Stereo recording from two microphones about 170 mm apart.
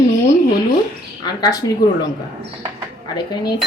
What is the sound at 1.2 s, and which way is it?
Speech, 25° left (ahead or behind).